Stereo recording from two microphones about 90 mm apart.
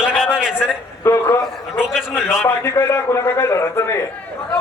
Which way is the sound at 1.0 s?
30° left (ahead or behind).